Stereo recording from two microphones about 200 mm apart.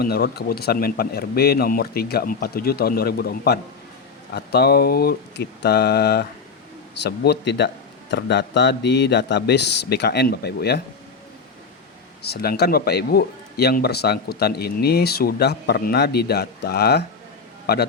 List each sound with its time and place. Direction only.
0.0 s a man's voice: 50° left (ahead or behind)
12.2 s a man's voice: 50° left (ahead or behind)